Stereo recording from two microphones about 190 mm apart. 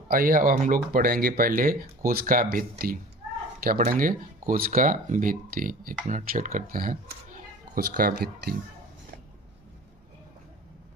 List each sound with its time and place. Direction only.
0.1 s speech: 50° right (ahead or behind)